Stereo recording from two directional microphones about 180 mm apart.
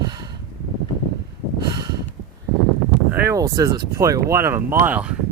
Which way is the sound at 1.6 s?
20° right (ahead or behind).